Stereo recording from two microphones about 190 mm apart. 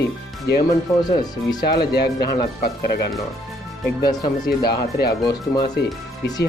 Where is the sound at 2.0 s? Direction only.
55° left (ahead or behind).